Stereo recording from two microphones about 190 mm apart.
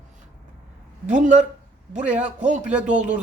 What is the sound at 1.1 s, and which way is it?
Speech, 40° right (ahead or behind).